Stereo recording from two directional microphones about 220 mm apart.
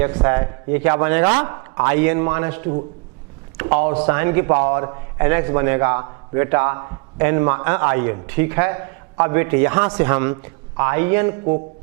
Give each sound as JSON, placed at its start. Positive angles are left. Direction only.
{"t": 0.0, "sound": "a man's voice", "side_deg": -15}